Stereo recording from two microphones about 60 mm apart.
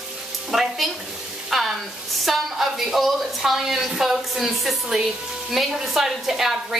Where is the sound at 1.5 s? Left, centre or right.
Centre.